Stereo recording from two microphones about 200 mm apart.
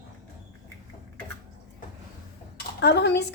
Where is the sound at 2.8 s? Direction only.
55° left (ahead or behind).